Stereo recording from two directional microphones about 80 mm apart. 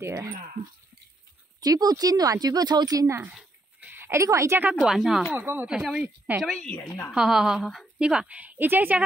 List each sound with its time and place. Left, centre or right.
0.0 s speech: right
1.6 s speech: right
3.9 s a woman's voice: right
4.8 s a woman's voice: centre
5.3 s a woman's voice: right
5.7 s a woman's voice: centre
6.4 s a woman's voice: centre
6.7 s a woman's voice: left
7.1 s a woman's voice: centre
8.0 s a woman's voice: centre